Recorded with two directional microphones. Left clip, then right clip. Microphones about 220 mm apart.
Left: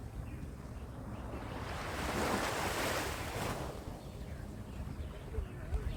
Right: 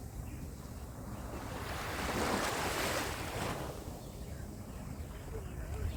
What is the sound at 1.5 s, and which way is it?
Waves, 50° right (ahead or behind).